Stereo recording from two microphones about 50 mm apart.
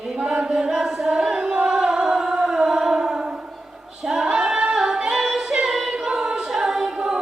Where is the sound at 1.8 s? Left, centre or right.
Centre.